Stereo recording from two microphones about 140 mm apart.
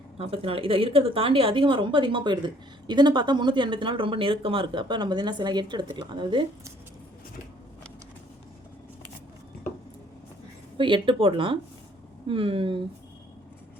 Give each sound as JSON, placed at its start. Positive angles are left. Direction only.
{"t": 0.2, "sound": "a woman's voice", "side_deg": -45}
{"t": 10.8, "sound": "a woman's voice", "side_deg": -35}